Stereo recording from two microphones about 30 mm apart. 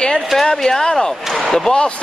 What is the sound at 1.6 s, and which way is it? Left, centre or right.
Speech, left.